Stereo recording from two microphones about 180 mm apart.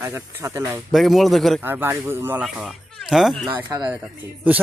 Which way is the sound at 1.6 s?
10° right (ahead or behind).